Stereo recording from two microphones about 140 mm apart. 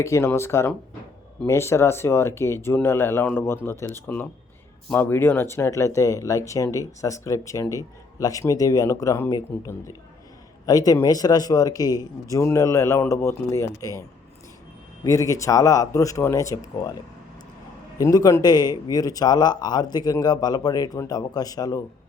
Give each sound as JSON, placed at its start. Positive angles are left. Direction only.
{"t": 0.0, "sound": "speech", "side_deg": 20}
{"t": 15.0, "sound": "speech", "side_deg": 25}
{"t": 17.9, "sound": "speech", "side_deg": 25}